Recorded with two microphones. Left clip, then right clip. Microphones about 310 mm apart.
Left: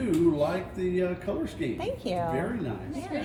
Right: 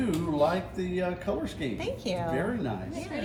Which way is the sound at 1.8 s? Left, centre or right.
Centre.